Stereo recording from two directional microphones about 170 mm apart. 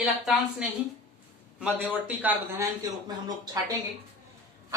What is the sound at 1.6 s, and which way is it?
A man's voice, 5° right (ahead or behind).